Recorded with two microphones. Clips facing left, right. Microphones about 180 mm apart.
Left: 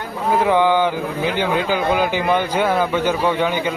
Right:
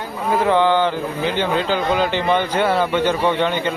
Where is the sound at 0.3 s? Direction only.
10° left (ahead or behind).